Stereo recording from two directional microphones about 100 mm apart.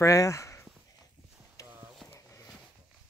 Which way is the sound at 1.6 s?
30° left (ahead or behind).